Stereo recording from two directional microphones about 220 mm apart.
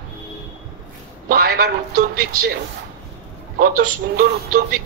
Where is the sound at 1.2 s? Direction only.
45° right (ahead or behind).